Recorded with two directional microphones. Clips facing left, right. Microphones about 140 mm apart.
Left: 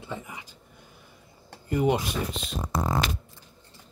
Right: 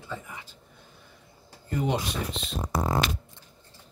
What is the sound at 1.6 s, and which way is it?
Speech, 10° left (ahead or behind).